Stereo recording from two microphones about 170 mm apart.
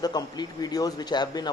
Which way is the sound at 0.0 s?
25° left (ahead or behind).